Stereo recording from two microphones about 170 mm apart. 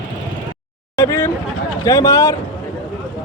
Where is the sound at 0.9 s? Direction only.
20° left (ahead or behind).